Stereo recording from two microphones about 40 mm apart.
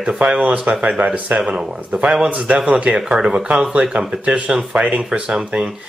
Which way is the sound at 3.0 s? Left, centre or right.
Centre.